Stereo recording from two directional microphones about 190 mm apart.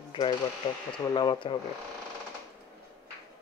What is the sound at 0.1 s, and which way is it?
Speech, 25° left (ahead or behind).